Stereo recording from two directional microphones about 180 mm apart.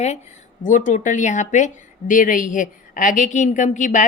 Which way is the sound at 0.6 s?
45° left (ahead or behind).